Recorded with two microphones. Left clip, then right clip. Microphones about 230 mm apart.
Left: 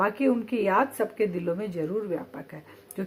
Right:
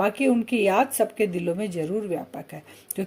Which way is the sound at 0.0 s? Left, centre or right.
Right.